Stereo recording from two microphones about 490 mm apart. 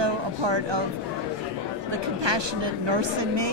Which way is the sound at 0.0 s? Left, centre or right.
Right.